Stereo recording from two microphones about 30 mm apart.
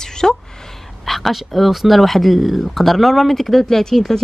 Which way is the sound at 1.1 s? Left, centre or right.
Centre.